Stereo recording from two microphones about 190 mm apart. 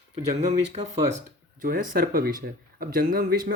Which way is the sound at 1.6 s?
50° right (ahead or behind).